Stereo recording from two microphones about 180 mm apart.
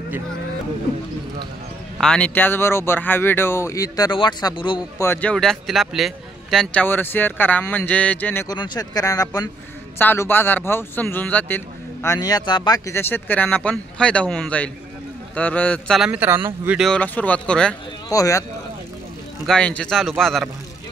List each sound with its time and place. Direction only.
2.0 s speech: 5° left (ahead or behind)
8.5 s speech: 25° left (ahead or behind)
16.0 s speech: 10° right (ahead or behind)
16.8 s a man's voice: 5° left (ahead or behind)
18.1 s speech: 20° left (ahead or behind)
19.4 s a man's voice: 5° left (ahead or behind)